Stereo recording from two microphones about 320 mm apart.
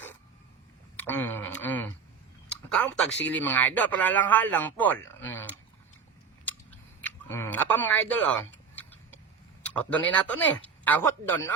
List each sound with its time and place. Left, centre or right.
0.9 s a sound: centre
3.3 s speech: centre
6.4 s chewing: centre
9.6 s speech: centre